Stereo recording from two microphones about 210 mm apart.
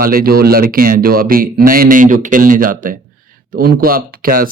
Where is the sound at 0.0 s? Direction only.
45° right (ahead or behind).